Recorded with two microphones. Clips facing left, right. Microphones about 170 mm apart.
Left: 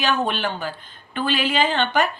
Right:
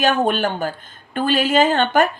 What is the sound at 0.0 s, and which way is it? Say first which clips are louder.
A woman's voice: right 5 dB; 45° right (ahead or behind).